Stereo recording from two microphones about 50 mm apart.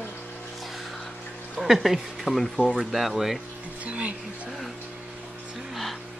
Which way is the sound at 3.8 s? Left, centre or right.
Right.